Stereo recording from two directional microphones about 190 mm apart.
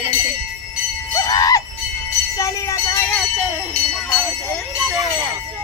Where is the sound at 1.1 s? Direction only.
20° left (ahead or behind).